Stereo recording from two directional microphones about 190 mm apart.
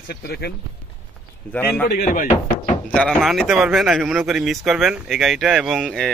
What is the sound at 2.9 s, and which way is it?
Speech, 5° left (ahead or behind).